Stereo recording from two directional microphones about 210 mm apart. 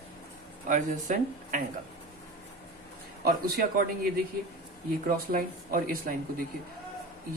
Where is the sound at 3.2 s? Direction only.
45° right (ahead or behind).